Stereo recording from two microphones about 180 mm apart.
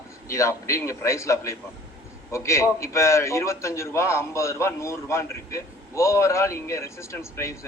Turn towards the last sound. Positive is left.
turn(degrees=15)  # may be behind; listen again after turning